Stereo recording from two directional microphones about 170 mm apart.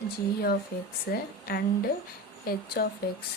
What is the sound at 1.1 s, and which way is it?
Speech, 60° left (ahead or behind).